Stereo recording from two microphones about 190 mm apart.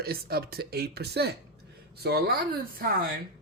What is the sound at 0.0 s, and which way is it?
A man's voice, 55° right (ahead or behind).